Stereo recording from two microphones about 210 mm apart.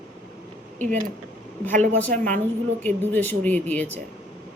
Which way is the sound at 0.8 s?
35° right (ahead or behind).